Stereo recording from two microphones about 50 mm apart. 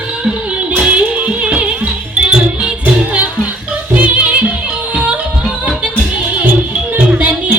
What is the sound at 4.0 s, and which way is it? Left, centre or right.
Music, right.